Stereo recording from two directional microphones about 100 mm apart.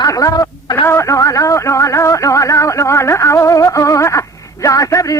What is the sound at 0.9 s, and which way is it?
Music, 30° left (ahead or behind).